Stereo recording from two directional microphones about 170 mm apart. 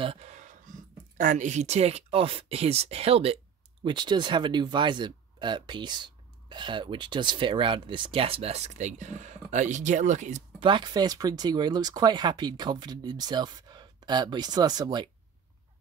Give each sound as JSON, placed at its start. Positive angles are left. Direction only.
{"t": 0.0, "sound": "speech", "side_deg": -35}
{"t": 10.6, "sound": "speech", "side_deg": -30}